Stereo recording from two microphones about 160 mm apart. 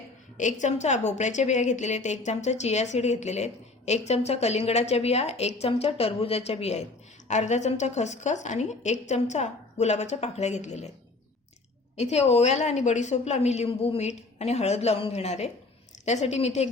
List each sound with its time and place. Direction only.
0.3 s a woman's voice: 50° left (ahead or behind)
11.9 s a woman's voice: 45° left (ahead or behind)